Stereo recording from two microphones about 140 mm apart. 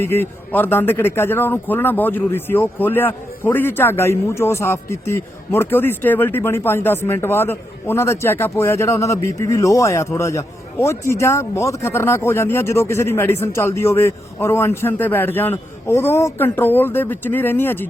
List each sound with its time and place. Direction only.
0.0 s a man's voice: 15° left (ahead or behind)